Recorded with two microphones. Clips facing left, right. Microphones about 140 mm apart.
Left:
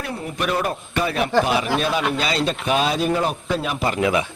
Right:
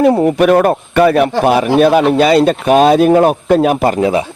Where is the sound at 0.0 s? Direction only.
85° right; by 4.0 s 50° right (ahead or behind).